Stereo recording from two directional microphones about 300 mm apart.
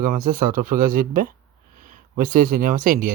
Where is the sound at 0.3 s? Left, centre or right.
Right.